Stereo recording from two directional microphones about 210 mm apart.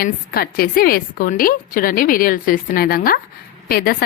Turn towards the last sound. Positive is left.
turn(degrees=45)  # may be behind; listen again after turning